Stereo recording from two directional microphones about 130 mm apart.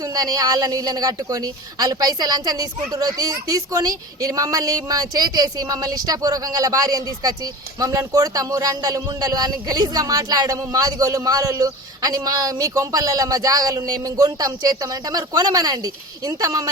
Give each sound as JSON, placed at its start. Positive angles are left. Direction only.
{"t": 0.0, "sound": "a woman's voice", "side_deg": -30}